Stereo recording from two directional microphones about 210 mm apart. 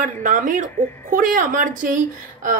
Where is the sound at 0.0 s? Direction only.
40° right (ahead or behind).